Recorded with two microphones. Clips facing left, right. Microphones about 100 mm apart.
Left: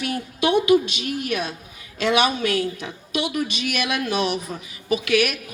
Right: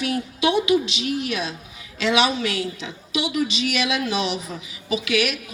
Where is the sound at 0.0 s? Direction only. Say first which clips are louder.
Right 1 dB; 50° left (ahead or behind).